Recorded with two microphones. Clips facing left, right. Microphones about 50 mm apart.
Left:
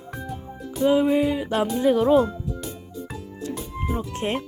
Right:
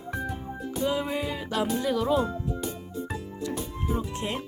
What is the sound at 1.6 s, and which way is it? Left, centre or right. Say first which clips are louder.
Speech: left 6 dB; left.